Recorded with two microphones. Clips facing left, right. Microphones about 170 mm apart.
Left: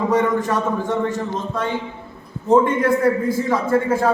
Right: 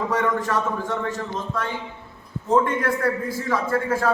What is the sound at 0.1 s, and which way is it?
Speech, 20° left (ahead or behind).